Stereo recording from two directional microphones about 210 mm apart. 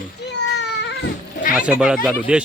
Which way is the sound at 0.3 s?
55° left (ahead or behind).